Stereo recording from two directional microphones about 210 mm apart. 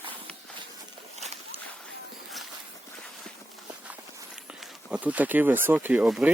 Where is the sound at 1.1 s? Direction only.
30° right (ahead or behind).